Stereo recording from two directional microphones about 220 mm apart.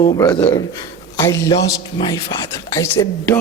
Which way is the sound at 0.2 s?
15° left (ahead or behind).